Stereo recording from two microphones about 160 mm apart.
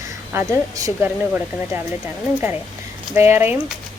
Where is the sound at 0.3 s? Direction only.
20° right (ahead or behind).